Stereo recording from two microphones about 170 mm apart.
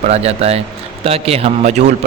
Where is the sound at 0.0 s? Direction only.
35° right (ahead or behind).